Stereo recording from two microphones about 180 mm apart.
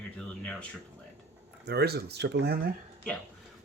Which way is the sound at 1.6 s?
65° right (ahead or behind).